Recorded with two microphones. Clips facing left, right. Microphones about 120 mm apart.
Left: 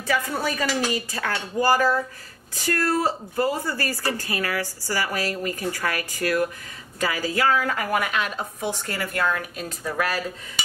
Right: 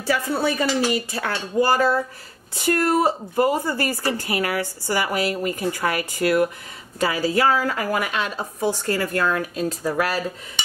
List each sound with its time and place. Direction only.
0.0 s a woman's voice: 30° right (ahead or behind)